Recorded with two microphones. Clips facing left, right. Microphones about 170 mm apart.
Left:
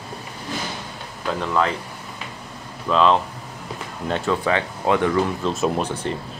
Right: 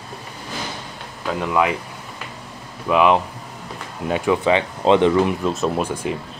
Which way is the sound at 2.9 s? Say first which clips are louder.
Right 2 dB; 15° right (ahead or behind).